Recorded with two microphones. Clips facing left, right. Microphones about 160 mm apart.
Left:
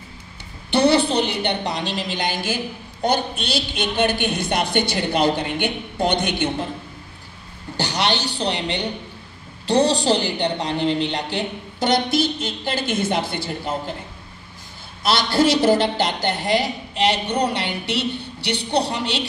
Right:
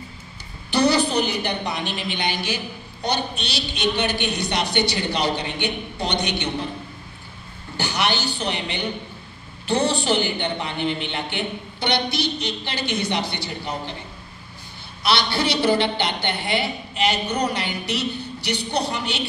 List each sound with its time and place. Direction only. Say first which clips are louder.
0.7 s a woman's voice: left 3 dB; 25° left (ahead or behind); by 6.3 s 50° left (ahead or behind)
7.7 s a woman's voice: left 2 dB; 35° left (ahead or behind)
15.0 s a woman's voice: left 4 dB; 45° left (ahead or behind)